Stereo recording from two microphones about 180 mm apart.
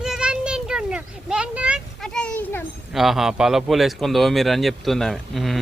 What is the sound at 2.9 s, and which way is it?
Speech, centre (ahead or behind).